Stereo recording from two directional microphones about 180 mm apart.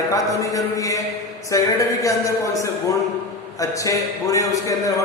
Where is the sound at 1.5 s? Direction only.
15° left (ahead or behind).